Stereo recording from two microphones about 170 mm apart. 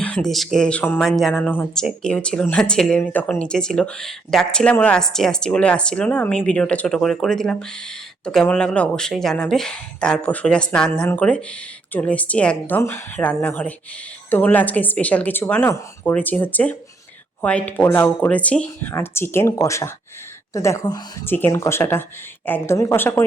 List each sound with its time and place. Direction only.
0.0 s speech: 5° left (ahead or behind)